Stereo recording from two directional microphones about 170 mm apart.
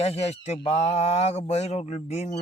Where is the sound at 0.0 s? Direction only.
40° left (ahead or behind).